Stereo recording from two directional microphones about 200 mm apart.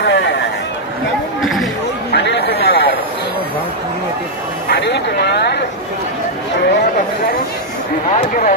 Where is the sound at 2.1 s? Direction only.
55° left (ahead or behind).